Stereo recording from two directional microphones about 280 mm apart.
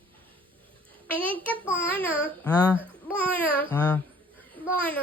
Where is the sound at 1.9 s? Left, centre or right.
Centre.